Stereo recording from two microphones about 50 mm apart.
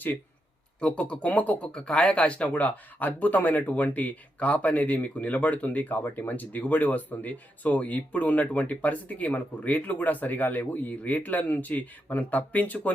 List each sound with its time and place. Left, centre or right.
0.8 s speech: left
1.6 s speech: centre